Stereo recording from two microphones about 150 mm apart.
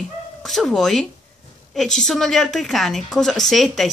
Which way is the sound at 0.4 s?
Centre (ahead or behind).